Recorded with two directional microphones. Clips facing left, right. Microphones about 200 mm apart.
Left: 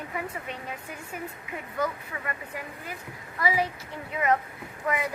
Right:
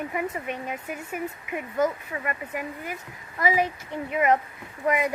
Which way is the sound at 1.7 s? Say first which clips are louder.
Right 5 dB; 20° right (ahead or behind).